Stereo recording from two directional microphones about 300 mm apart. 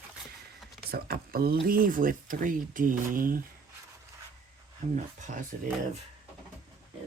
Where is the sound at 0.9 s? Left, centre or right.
Right.